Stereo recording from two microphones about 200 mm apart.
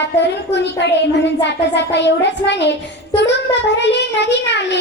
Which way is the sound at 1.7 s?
60° left (ahead or behind).